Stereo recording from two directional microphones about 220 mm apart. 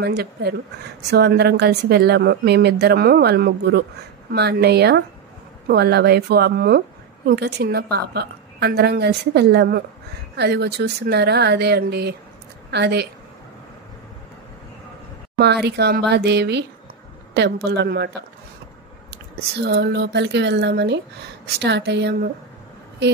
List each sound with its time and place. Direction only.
0.0 s speech: 45° right (ahead or behind)
15.3 s speech: 50° right (ahead or behind)
17.3 s a sound: 50° right (ahead or behind)
17.6 s speech: 50° right (ahead or behind)
19.6 s speech: 45° right (ahead or behind)